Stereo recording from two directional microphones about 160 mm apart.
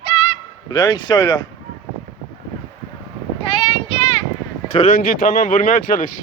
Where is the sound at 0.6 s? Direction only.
25° left (ahead or behind).